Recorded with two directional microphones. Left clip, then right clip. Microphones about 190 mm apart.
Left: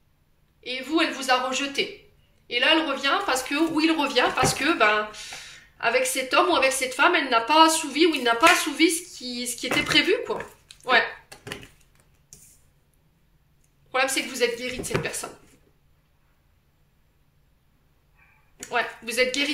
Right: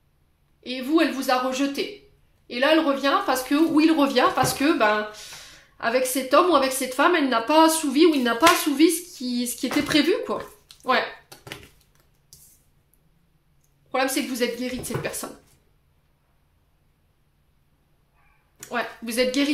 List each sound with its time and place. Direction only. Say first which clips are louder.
0.7 s a woman's voice: right 2 dB; 50° right (ahead or behind)
13.9 s a woman's voice: even; 55° right (ahead or behind)
18.6 s a sound: left 2 dB; 55° right (ahead or behind)